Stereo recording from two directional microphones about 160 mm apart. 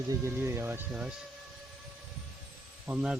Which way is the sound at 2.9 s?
5° right (ahead or behind).